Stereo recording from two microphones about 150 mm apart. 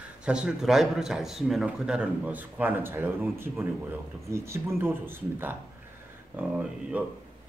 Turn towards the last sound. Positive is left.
turn(degrees=-10)  # may be behind; listen again after turning